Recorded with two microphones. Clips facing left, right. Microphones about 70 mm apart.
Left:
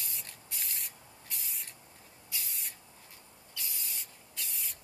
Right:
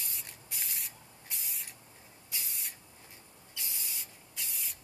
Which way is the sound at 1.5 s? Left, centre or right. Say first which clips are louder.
Even; centre.